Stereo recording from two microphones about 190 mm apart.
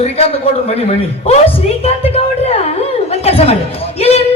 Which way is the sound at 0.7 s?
30° left (ahead or behind).